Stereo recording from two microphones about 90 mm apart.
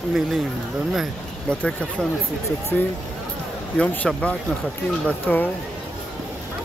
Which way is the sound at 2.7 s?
20° left (ahead or behind).